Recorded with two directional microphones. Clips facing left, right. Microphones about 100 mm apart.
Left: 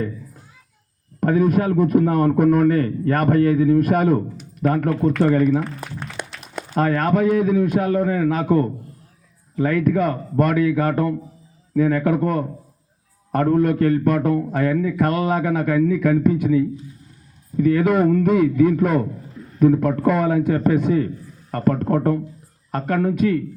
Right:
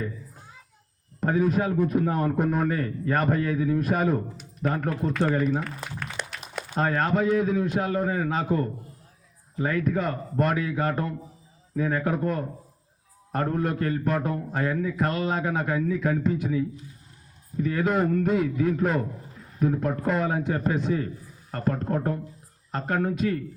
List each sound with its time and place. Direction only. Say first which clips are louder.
1.2 s a man's voice: left 6 dB; 60° left (ahead or behind)
6.7 s a man's voice: left 5 dB; 60° left (ahead or behind)
17.6 s a man's voice: left 8 dB; 60° left (ahead or behind)
19.5 s a man's voice: left 9 dB; 70° left (ahead or behind)